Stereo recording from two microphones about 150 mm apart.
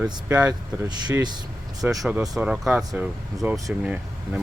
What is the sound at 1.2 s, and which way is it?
Vehicle, 30° right (ahead or behind).